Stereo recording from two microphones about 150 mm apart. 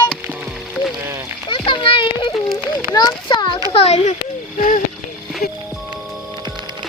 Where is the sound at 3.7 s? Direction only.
45° left (ahead or behind).